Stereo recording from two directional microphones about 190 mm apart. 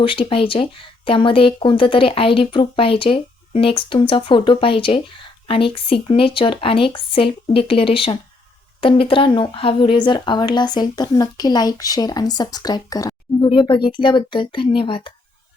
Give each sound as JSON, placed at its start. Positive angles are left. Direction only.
{"t": 0.0, "sound": "speech", "side_deg": 25}